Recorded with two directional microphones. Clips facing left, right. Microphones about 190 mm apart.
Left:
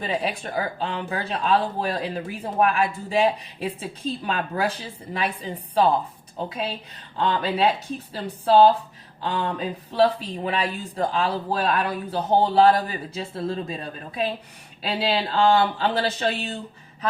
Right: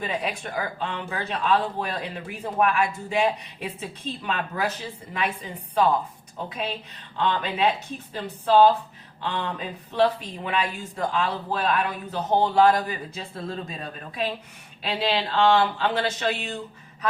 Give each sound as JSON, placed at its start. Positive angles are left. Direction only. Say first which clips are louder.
{"t": 0.0, "sound": "speech", "louder": "left 2 dB", "side_deg": 30}
{"t": 7.2, "sound": "speech", "louder": "left 2 dB", "side_deg": 35}
{"t": 14.8, "sound": "speech", "louder": "left 1 dB", "side_deg": 35}